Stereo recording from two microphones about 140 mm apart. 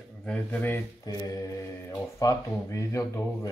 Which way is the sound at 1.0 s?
25° left (ahead or behind).